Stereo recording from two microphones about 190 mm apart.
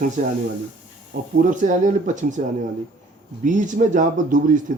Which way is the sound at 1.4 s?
40° right (ahead or behind).